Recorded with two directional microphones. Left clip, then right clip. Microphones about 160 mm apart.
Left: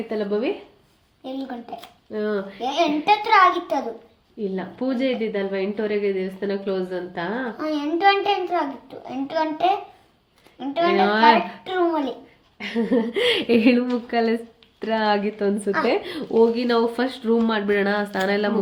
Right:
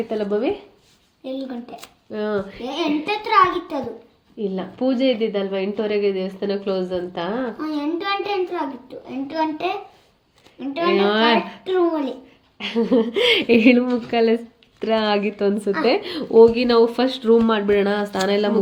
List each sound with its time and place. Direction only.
0.2 s speech: 30° right (ahead or behind)
1.2 s a child's voice: 25° left (ahead or behind)
2.1 s speech: 35° right (ahead or behind)
2.6 s a child's voice: 20° left (ahead or behind)
4.5 s speech: 30° right (ahead or behind)
7.6 s a child's voice: 20° left (ahead or behind)
11.0 s speech: 25° right (ahead or behind)
11.6 s a child's voice: 20° left (ahead or behind)
12.5 s a sound: 50° right (ahead or behind)
12.9 s speech: 30° right (ahead or behind)